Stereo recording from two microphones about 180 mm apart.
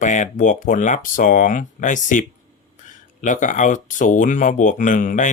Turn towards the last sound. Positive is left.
turn(degrees=45)  # may be behind; listen again after turning